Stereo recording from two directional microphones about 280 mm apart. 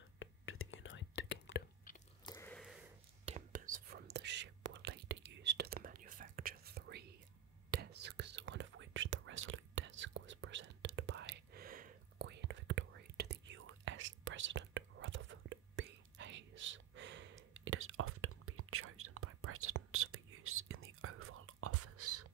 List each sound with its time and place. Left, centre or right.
0.2 s whispering: left
2.2 s a sound: centre
3.3 s whispering: right